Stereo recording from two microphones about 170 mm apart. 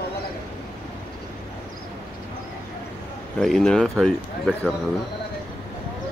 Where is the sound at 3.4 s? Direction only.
Centre (ahead or behind).